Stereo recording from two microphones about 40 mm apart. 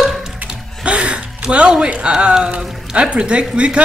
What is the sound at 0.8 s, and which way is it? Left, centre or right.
Speech, right.